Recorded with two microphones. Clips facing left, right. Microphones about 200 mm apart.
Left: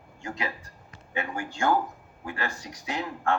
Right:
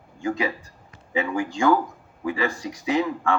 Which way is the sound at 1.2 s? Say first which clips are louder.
Right 7 dB; 90° right.